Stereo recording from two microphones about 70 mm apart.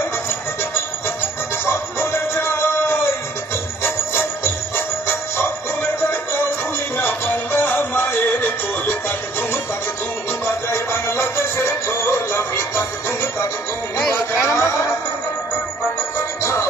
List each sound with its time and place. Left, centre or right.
1.7 s music: left
3.8 s jingle bell: left
7.0 s music: left
10.4 s music: left
14.4 s a sound: left